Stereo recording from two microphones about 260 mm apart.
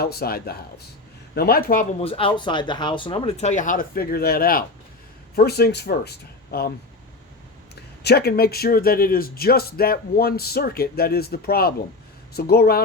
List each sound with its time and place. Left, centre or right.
0.0 s a man's voice: left
8.0 s a man's voice: left